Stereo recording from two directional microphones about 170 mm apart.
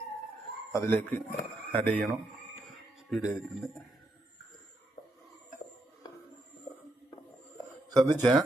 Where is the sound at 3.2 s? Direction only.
5° right (ahead or behind).